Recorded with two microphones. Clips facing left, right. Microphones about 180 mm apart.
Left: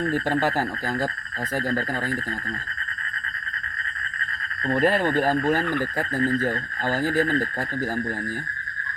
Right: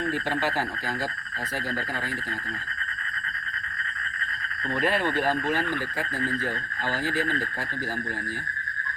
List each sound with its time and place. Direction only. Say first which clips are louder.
0.1 s speech: left 5 dB; 45° left (ahead or behind)
4.7 s speech: left 5 dB; 45° left (ahead or behind)